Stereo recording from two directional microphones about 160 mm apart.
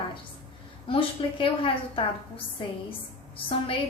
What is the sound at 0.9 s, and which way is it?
A woman's voice, 35° left (ahead or behind).